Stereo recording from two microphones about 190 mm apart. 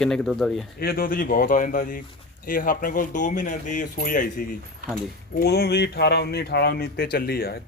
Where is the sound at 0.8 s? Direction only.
50° left (ahead or behind).